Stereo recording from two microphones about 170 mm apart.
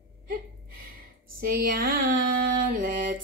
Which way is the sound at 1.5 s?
55° right (ahead or behind).